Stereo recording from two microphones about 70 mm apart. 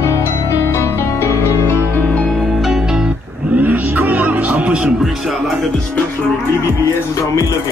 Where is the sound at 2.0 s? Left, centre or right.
Centre.